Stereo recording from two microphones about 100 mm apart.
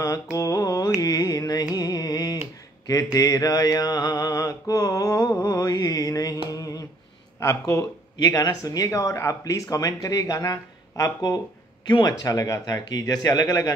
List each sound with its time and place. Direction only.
0.0 s mantra: 35° left (ahead or behind)
1.0 s carnatic music: 40° left (ahead or behind)
2.9 s mantra: 35° left (ahead or behind)
7.3 s speech: 30° left (ahead or behind)
8.2 s mantra: 40° left (ahead or behind)